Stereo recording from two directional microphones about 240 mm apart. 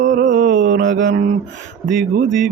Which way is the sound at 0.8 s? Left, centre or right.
Right.